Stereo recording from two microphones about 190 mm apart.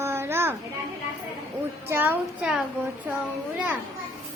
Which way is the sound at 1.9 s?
10° right (ahead or behind).